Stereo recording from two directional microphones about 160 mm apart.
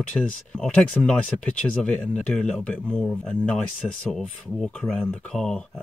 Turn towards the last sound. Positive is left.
turn(degrees=5)  # may be behind; listen again after turning